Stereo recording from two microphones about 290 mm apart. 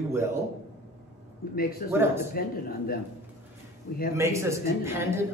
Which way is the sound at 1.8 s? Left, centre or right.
Left.